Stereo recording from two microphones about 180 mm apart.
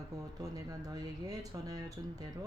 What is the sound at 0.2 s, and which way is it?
Speech, 20° right (ahead or behind).